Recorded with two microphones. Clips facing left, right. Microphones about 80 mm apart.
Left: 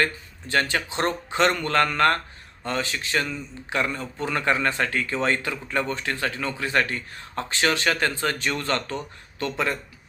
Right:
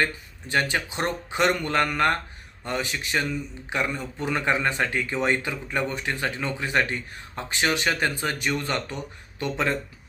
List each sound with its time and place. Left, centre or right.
0.0 s a man's voice: centre